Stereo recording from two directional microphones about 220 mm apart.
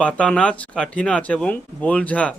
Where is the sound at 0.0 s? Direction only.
5° left (ahead or behind).